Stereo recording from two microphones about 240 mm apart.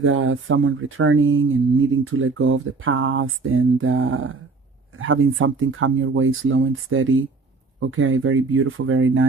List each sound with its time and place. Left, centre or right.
0.0 s speech: right